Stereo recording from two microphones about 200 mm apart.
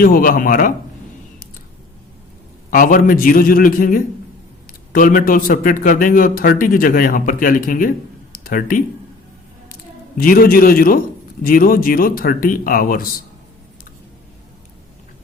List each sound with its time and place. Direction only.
0.0 s speech: 45° left (ahead or behind)
2.6 s speech: 45° left (ahead or behind)
10.2 s speech: 45° left (ahead or behind)